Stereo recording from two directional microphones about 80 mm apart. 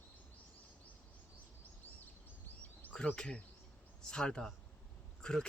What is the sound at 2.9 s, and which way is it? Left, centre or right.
Speech, centre.